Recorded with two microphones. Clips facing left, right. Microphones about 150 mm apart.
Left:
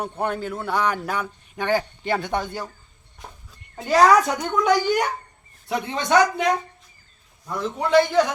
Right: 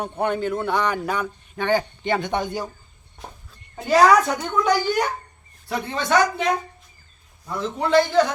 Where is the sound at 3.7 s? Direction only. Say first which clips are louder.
Even; centre (ahead or behind).